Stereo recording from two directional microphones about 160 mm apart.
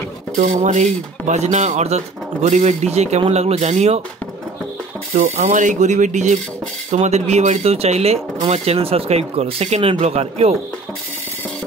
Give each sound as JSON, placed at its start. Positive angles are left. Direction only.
{"t": 0.4, "sound": "speech", "side_deg": -50}
{"t": 5.1, "sound": "speech", "side_deg": -55}